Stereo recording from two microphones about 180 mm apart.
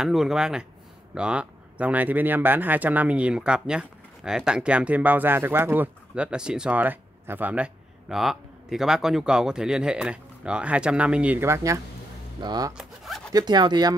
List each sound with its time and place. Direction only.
0.0 s speech: centre (ahead or behind); by 12.7 s 25° right (ahead or behind)
12.7 s zipper: centre (ahead or behind)
13.3 s speech: 20° right (ahead or behind)